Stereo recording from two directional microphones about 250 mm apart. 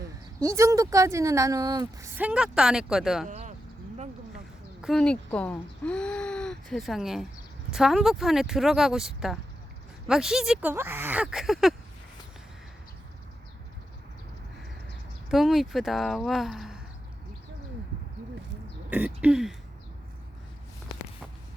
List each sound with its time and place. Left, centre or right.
0.3 s speech: centre
3.2 s a sound: right
4.8 s speech: centre
15.3 s speech: centre
18.9 s speech: centre